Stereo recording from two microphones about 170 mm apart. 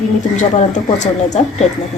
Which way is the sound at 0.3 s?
45° left (ahead or behind).